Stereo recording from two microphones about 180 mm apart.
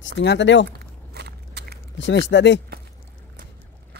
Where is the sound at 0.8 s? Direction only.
65° right (ahead or behind).